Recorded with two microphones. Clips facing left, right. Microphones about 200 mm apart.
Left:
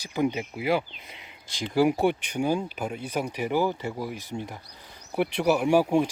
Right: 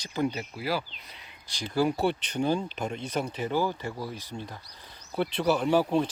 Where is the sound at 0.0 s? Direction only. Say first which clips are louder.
Left 3 dB; 15° left (ahead or behind).